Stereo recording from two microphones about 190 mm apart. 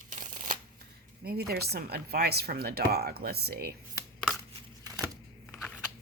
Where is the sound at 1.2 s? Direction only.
55° right (ahead or behind).